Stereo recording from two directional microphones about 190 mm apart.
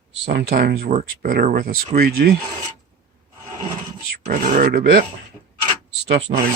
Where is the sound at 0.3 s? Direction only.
55° right (ahead or behind).